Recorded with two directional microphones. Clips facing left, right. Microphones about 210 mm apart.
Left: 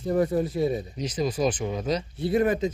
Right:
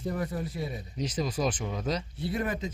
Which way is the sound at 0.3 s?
25° left (ahead or behind).